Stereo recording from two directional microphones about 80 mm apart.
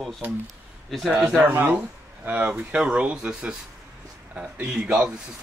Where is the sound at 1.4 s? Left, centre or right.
Right.